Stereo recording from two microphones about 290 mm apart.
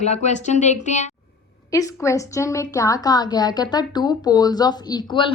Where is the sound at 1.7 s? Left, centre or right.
Centre.